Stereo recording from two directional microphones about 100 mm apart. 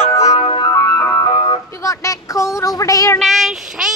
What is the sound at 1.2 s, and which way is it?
Music, 55° left (ahead or behind).